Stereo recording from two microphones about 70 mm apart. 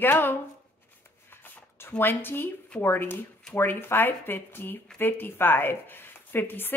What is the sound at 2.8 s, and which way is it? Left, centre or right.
Speech, left.